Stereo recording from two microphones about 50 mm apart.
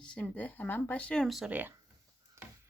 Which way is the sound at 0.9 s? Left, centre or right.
Left.